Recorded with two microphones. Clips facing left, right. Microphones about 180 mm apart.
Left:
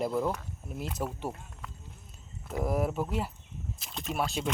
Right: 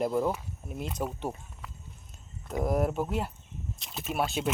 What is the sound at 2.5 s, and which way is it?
Speech, centre (ahead or behind).